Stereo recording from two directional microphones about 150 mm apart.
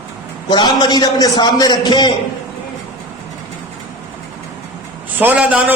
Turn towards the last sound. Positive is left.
turn(degrees=-10)  # may be behind; listen again after turning